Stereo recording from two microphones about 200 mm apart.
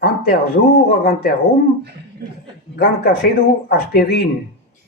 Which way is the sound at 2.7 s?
50° left (ahead or behind).